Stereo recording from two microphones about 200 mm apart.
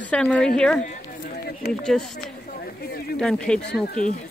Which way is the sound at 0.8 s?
50° left (ahead or behind).